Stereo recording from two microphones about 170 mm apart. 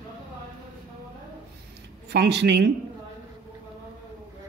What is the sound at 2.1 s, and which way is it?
Speech, 75° right (ahead or behind).